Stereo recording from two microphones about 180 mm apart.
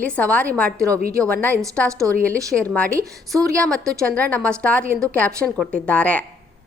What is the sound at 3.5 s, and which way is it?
A woman's voice, 5° left (ahead or behind).